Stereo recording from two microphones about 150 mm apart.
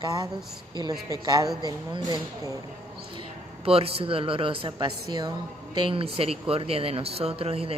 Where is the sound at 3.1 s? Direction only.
40° right (ahead or behind).